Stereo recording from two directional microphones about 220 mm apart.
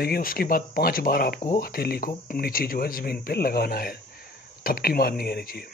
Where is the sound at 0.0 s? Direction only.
40° left (ahead or behind).